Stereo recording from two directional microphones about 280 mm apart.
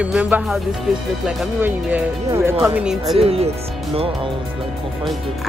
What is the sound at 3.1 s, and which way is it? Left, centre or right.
Speech, right.